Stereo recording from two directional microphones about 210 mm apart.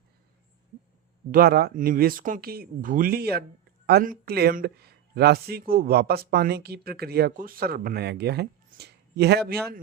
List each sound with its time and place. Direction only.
1.3 s speech: 45° right (ahead or behind)